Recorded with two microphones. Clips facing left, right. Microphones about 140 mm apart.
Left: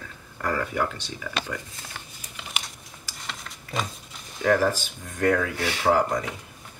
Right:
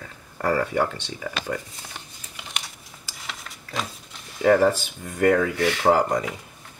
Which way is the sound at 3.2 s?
Centre (ahead or behind).